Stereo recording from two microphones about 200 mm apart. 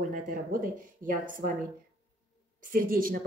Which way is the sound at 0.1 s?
45° right (ahead or behind).